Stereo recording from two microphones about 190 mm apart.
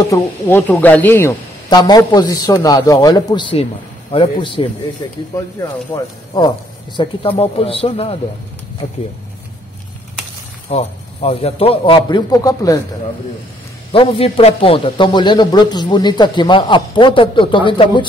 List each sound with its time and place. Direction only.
0.0 s a man's voice: 15° left (ahead or behind)
7.0 s a man's voice: 30° left (ahead or behind)
10.7 s a man's voice: 35° left (ahead or behind); by 12.8 s 20° left (ahead or behind)
13.9 s a man's voice: 30° left (ahead or behind)